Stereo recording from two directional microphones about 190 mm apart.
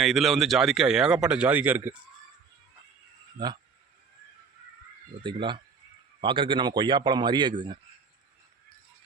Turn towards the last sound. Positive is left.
turn(degrees=-25)  # may be behind; listen again after turning